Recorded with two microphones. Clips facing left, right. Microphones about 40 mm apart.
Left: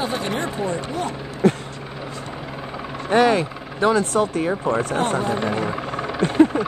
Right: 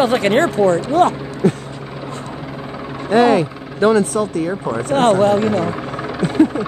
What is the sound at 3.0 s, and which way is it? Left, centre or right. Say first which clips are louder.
Speech: right 4 dB; centre.